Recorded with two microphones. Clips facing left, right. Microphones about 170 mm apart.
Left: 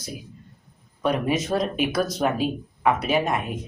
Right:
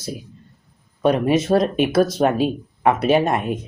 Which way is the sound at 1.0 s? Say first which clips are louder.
Right 6 dB; 30° right (ahead or behind).